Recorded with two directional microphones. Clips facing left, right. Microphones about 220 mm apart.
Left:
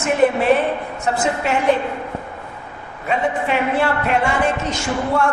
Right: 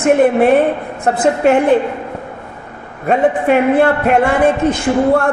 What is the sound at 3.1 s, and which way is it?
A man's voice, 50° right (ahead or behind).